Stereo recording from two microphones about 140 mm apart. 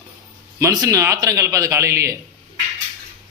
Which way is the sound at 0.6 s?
25° right (ahead or behind).